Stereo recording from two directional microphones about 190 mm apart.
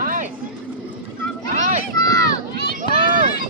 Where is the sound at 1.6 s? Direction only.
45° right (ahead or behind).